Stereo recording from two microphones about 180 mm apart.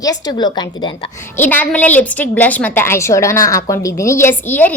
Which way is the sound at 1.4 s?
10° left (ahead or behind).